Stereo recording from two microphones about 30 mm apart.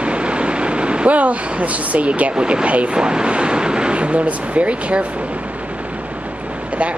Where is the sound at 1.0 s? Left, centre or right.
Right.